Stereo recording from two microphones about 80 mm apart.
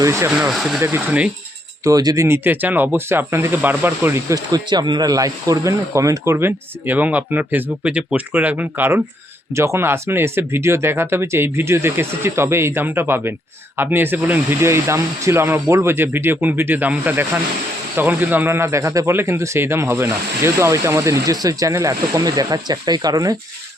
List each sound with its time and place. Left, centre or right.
0.0 s speech: right
0.3 s speech: centre
0.5 s speech: centre
1.8 s speech: right
2.2 s speech: right
4.5 s speech: right
6.3 s speech: right
9.6 s speech: right